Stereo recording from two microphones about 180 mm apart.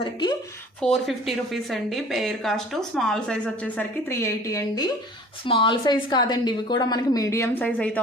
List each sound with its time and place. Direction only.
0.0 s a woman's voice: 25° left (ahead or behind)
0.8 s a woman's voice: centre (ahead or behind)